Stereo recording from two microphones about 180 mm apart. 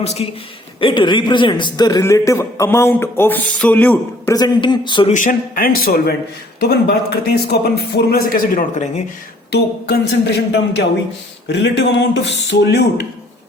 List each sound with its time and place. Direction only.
0.0 s a man's voice: 35° left (ahead or behind); by 4.4 s 10° left (ahead or behind)
4.4 s speech: 25° left (ahead or behind)
5.1 s a man's voice: 45° left (ahead or behind)
9.5 s a man's voice: 65° left (ahead or behind)